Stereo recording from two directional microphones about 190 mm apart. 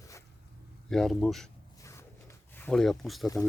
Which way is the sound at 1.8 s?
15° left (ahead or behind).